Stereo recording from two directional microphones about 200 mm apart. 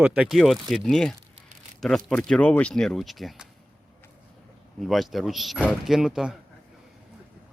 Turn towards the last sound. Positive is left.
turn(degrees=-5)  # may be behind; listen again after turning